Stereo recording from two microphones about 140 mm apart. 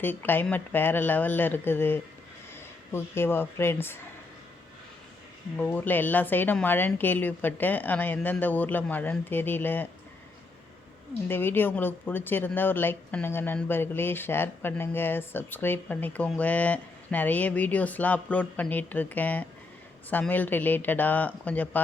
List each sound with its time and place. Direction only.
0.0 s speech: 15° left (ahead or behind)
5.5 s speech: 10° left (ahead or behind)
11.3 s speech: 15° left (ahead or behind)